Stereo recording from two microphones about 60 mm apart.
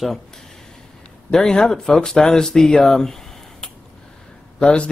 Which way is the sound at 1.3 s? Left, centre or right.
Centre.